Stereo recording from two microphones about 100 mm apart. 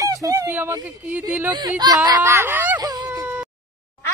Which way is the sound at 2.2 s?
25° right (ahead or behind).